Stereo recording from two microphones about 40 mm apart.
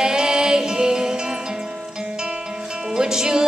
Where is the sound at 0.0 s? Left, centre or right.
Centre.